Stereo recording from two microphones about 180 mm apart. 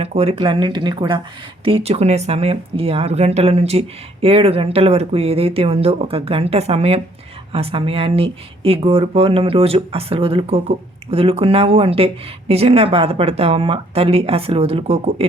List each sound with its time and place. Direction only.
0.0 s speech: 35° right (ahead or behind)